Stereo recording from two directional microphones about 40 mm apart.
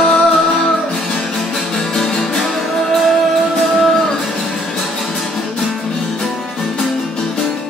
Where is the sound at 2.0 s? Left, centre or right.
Centre.